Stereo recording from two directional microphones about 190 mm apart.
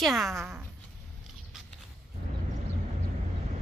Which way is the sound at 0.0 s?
Centre (ahead or behind).